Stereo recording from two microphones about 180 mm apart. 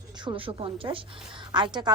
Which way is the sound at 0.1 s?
25° right (ahead or behind).